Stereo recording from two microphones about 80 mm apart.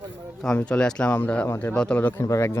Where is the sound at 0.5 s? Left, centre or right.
Centre.